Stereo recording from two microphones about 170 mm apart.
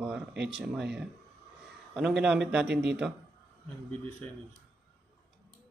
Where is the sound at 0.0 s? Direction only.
5° right (ahead or behind).